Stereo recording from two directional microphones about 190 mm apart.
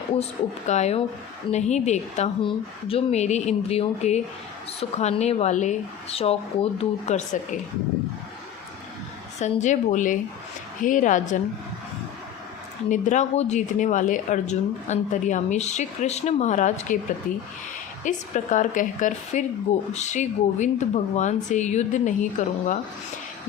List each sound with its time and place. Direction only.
0.7 s speech: 35° left (ahead or behind)
9.4 s a woman's voice: 40° left (ahead or behind)
12.9 s a woman's voice: 40° left (ahead or behind)